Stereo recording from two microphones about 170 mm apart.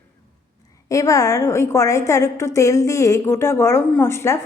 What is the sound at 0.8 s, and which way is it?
A woman's voice, 20° left (ahead or behind).